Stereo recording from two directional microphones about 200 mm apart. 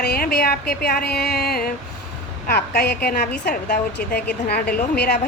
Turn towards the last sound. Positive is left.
turn(degrees=50)  # may be behind; listen again after turning